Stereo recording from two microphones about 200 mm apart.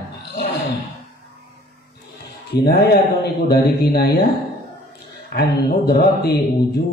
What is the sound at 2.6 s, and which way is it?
A man's voice, 55° left (ahead or behind).